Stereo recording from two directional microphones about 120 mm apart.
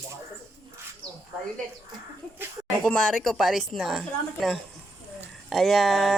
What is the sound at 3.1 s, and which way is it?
A woman's voice, centre (ahead or behind).